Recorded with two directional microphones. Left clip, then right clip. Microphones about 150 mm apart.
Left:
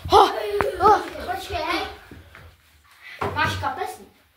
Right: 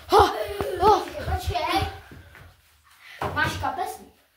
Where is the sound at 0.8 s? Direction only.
20° right (ahead or behind).